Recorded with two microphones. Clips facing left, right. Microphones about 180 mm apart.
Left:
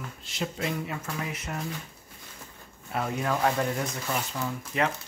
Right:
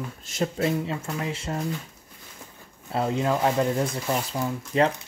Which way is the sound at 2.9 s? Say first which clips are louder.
Right 5 dB; 25° right (ahead or behind).